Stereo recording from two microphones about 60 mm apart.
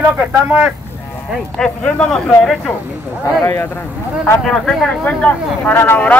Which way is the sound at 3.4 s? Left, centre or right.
Left.